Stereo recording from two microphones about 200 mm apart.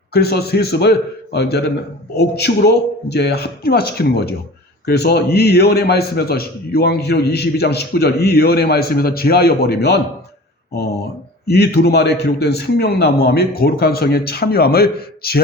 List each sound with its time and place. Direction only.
0.1 s a man's voice: 50° left (ahead or behind)
11.4 s a man's voice: 55° left (ahead or behind)